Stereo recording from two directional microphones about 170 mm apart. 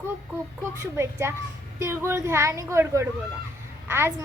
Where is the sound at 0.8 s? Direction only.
15° right (ahead or behind).